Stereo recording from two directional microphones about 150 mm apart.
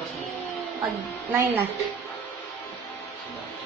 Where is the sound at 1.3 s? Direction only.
15° right (ahead or behind).